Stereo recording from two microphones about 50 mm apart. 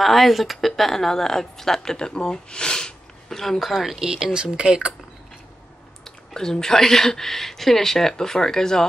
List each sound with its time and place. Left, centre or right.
0.0 s speech: centre
4.0 s speech: centre
6.0 s speech: centre